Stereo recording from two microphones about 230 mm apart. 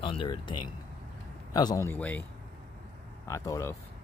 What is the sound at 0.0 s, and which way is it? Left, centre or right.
Speech, left.